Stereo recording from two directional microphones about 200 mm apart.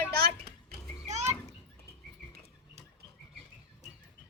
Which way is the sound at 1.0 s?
35° right (ahead or behind).